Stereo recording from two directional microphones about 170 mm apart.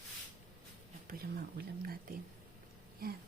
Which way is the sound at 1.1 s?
55° right (ahead or behind).